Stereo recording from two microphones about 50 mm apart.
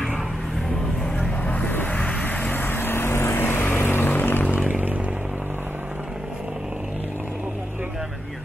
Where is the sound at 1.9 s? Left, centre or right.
Left.